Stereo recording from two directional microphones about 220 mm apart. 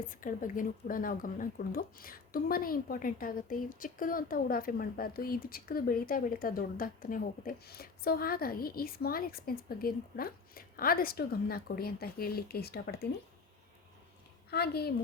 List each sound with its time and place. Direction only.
0.1 s speech: 35° left (ahead or behind)
14.5 s a woman's voice: 45° left (ahead or behind)